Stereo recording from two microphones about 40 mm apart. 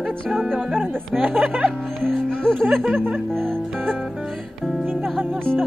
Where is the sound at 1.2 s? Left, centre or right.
Right.